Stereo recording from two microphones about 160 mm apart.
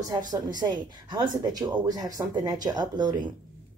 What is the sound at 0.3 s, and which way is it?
Speech, 25° right (ahead or behind).